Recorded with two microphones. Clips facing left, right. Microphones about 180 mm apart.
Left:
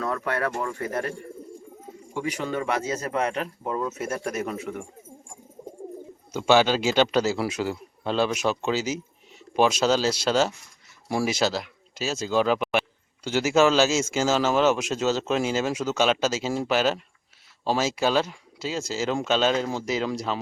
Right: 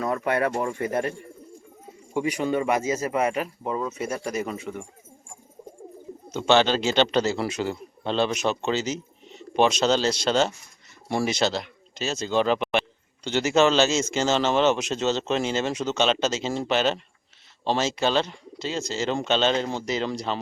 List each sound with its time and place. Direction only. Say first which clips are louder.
0.0 s a man's voice: right 3 dB; 20° right (ahead or behind); by 4.9 s centre (ahead or behind)
6.3 s a man's voice: even; 10° left (ahead or behind)